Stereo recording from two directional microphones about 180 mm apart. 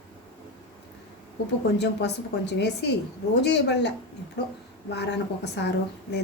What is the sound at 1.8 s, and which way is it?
Speech, 65° left (ahead or behind).